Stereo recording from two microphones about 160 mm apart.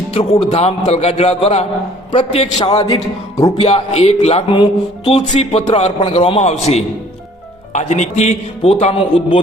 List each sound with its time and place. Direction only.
0.1 s speech: 40° left (ahead or behind)
2.7 s a man's voice: 25° left (ahead or behind)
3.6 s speech: 40° left (ahead or behind)